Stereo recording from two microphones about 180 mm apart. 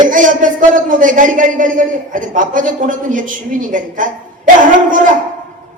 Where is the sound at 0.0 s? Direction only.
45° right (ahead or behind).